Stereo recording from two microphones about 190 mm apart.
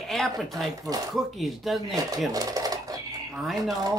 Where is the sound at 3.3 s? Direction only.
Centre (ahead or behind).